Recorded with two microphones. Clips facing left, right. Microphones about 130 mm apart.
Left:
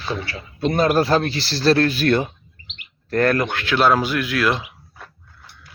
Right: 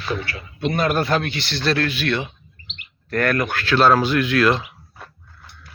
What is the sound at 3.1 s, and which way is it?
Speech, 30° left (ahead or behind).